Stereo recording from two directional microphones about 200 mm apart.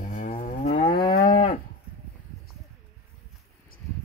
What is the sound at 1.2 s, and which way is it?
Moo, 25° left (ahead or behind).